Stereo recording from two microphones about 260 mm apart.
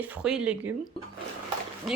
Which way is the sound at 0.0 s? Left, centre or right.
Centre.